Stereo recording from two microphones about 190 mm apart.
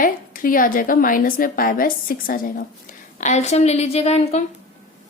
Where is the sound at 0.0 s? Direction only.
45° left (ahead or behind).